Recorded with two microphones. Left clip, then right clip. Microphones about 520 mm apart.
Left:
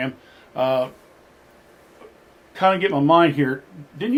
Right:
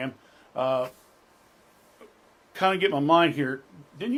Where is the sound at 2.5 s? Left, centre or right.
Right.